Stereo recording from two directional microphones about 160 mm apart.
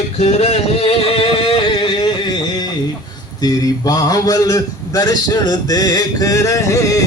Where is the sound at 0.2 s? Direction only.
45° left (ahead or behind); by 2.6 s 25° left (ahead or behind).